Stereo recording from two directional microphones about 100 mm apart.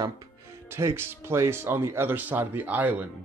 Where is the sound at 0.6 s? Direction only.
25° right (ahead or behind).